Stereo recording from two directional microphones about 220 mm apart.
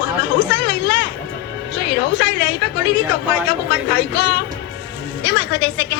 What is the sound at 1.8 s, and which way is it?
A woman's voice, 50° left (ahead or behind).